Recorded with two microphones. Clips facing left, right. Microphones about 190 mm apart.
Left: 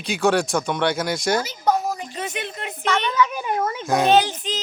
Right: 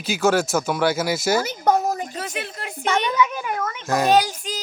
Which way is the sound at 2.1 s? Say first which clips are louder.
Left 1 dB; 5° right (ahead or behind).